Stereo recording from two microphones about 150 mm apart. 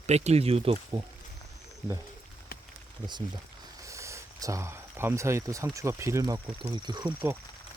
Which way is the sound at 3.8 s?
20° right (ahead or behind).